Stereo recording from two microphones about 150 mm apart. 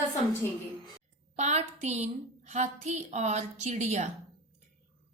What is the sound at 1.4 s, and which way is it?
A woman's voice, 50° right (ahead or behind).